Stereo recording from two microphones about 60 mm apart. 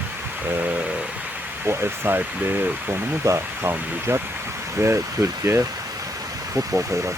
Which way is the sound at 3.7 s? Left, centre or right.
Right.